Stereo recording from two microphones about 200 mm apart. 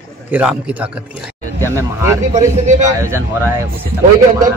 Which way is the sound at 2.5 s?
35° right (ahead or behind).